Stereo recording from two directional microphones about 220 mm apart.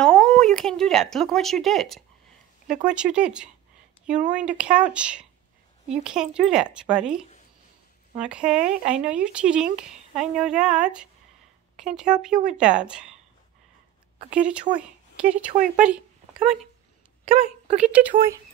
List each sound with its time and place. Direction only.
0.0 s speech: 5° left (ahead or behind)
14.3 s speech: 5° right (ahead or behind)
15.5 s speech: 35° right (ahead or behind)
17.5 s a woman's voice: 30° right (ahead or behind)
17.9 s speech: 5° right (ahead or behind)